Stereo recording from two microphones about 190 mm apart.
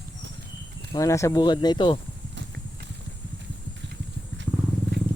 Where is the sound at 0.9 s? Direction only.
15° left (ahead or behind).